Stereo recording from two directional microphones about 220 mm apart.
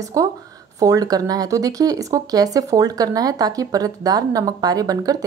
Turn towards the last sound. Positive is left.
turn(degrees=-15)  # may be behind; listen again after turning